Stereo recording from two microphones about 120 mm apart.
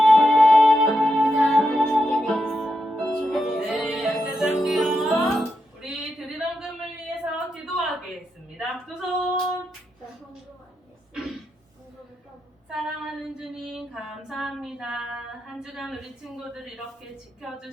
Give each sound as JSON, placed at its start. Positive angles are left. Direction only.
{"t": 0.0, "sound": "music", "side_deg": 0}
{"t": 7.3, "sound": "a sound", "side_deg": -5}
{"t": 8.5, "sound": "female singing", "side_deg": -5}
{"t": 12.7, "sound": "female singing", "side_deg": -5}
{"t": 15.6, "sound": "a sound", "side_deg": -5}
{"t": 16.2, "sound": "speech", "side_deg": 0}